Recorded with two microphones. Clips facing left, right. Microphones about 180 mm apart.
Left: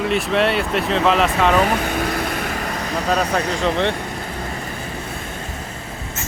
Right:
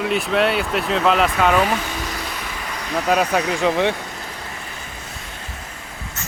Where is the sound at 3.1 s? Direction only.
10° right (ahead or behind).